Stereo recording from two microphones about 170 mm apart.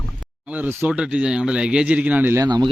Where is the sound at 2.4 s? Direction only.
25° right (ahead or behind).